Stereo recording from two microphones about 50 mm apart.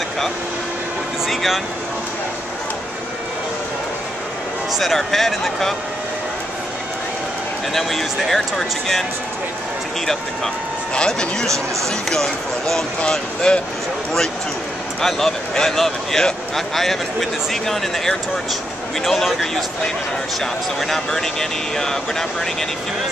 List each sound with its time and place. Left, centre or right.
1.2 s speech: centre
4.7 s speech: centre
7.7 s speech: centre
11.1 s speech: centre
15.0 s speech: centre